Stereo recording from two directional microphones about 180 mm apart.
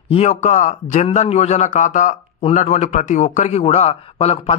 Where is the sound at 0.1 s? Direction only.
35° left (ahead or behind).